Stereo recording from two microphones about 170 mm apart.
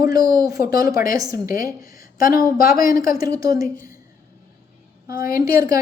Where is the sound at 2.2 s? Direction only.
55° left (ahead or behind).